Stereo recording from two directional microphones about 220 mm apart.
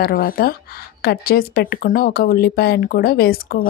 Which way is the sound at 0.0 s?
40° left (ahead or behind).